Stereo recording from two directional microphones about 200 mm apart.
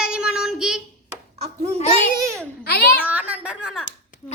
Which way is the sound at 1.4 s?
30° right (ahead or behind).